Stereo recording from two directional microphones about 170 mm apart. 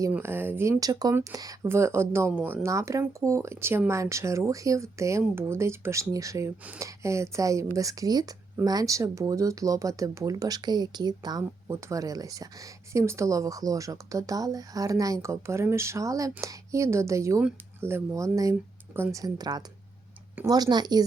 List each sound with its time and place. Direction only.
0.0 s speech: 15° right (ahead or behind)